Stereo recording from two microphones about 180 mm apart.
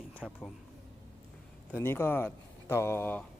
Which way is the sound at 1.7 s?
10° left (ahead or behind).